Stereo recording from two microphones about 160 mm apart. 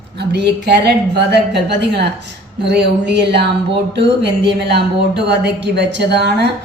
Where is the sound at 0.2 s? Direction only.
90° right.